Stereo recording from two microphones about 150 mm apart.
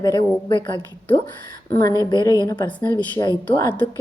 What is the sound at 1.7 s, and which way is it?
A woman's voice, 20° left (ahead or behind).